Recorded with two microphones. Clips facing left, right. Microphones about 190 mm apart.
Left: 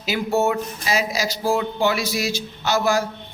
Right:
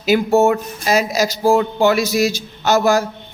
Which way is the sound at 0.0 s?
45° right (ahead or behind).